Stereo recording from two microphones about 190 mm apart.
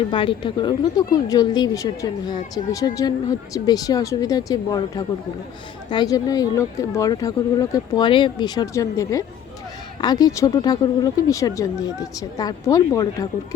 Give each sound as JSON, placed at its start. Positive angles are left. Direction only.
{"t": 0.1, "sound": "speech", "side_deg": 25}